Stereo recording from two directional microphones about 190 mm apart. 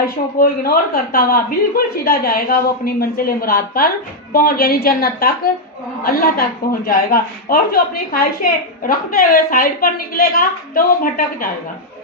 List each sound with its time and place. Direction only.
0.0 s speech: 50° left (ahead or behind)